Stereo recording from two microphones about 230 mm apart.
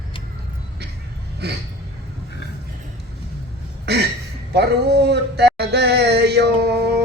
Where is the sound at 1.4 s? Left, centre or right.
Right.